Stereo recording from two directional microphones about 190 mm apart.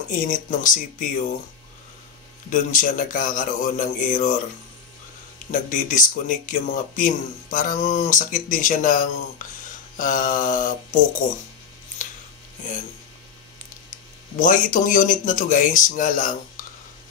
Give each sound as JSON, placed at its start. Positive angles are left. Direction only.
{"t": 0.1, "sound": "speech", "side_deg": 45}
{"t": 2.5, "sound": "speech", "side_deg": 45}
{"t": 5.5, "sound": "speech", "side_deg": 45}
{"t": 14.4, "sound": "speech", "side_deg": 45}